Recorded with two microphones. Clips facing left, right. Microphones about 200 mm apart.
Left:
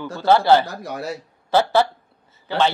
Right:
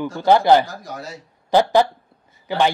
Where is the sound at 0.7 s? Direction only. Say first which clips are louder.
Left 4 dB; 65° left (ahead or behind).